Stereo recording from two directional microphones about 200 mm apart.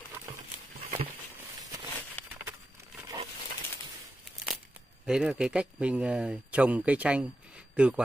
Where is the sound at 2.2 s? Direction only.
10° left (ahead or behind).